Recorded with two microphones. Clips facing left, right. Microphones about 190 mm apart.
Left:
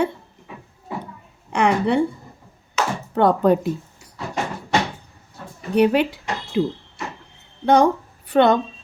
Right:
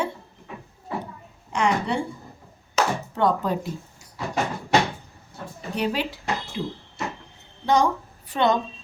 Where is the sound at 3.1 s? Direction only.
60° left (ahead or behind).